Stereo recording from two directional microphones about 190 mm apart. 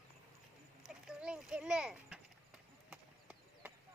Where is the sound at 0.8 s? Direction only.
5° right (ahead or behind).